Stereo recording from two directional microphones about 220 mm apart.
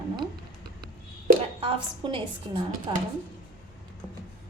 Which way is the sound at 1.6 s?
25° right (ahead or behind).